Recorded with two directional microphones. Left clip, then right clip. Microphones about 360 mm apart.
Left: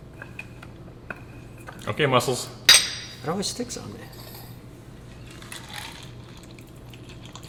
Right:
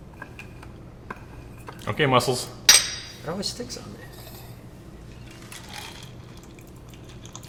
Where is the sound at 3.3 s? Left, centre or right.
Left.